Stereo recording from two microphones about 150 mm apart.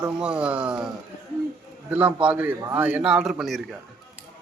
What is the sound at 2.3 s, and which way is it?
A man's voice, 10° right (ahead or behind).